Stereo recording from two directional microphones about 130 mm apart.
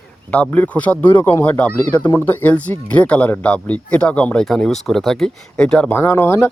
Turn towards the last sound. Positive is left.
turn(degrees=20)  # may be behind; listen again after turning